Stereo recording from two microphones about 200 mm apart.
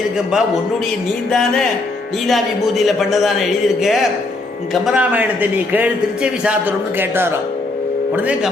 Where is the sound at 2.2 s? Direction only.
Centre (ahead or behind).